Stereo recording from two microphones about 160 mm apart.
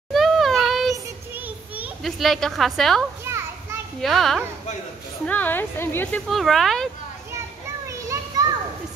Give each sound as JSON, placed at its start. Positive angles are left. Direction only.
{"t": 0.1, "sound": "child singing", "side_deg": 0}
{"t": 1.3, "sound": "a sound", "side_deg": -5}
{"t": 3.3, "sound": "children playing", "side_deg": -15}
{"t": 4.0, "sound": "a woman's voice", "side_deg": 0}
{"t": 6.2, "sound": "speech", "side_deg": 0}
{"t": 7.9, "sound": "children playing", "side_deg": -20}